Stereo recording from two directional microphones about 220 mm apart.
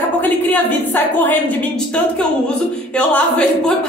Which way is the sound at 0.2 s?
10° left (ahead or behind).